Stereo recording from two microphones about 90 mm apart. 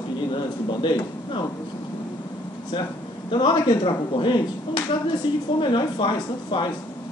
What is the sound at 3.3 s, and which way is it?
Speech, 60° left (ahead or behind).